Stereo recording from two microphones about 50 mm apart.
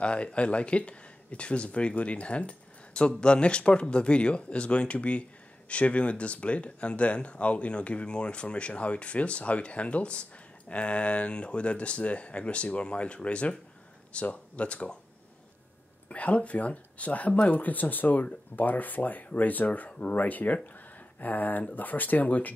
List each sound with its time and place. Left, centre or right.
0.0 s speech: left
16.1 s speech: left